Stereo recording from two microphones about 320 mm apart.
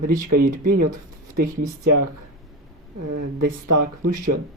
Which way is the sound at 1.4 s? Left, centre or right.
Right.